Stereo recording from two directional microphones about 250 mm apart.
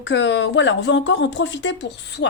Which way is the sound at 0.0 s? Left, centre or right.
Left.